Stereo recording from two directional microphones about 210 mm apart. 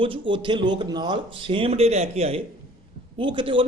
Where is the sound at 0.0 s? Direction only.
25° right (ahead or behind).